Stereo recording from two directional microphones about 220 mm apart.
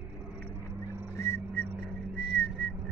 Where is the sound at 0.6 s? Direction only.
10° right (ahead or behind).